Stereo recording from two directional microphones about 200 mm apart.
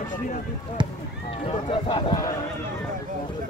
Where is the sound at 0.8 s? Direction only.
25° right (ahead or behind).